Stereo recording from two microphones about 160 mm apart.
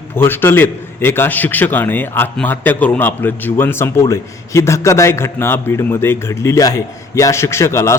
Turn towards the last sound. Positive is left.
turn(degrees=15)  # may be behind; listen again after turning